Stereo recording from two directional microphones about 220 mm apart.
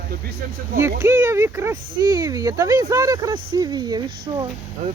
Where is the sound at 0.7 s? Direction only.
10° right (ahead or behind).